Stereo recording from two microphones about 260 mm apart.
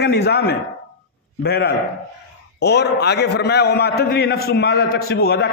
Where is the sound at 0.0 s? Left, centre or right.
Left.